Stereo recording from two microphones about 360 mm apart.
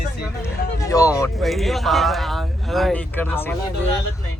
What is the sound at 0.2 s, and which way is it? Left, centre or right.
Speech, centre.